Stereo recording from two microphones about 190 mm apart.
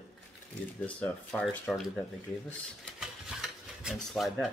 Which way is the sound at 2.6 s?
5° right (ahead or behind).